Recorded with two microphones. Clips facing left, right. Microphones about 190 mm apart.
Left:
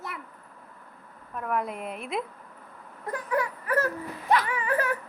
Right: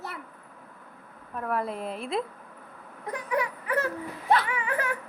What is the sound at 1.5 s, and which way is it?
Speech, 30° right (ahead or behind).